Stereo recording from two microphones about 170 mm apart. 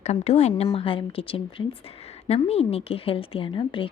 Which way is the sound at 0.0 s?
40° left (ahead or behind).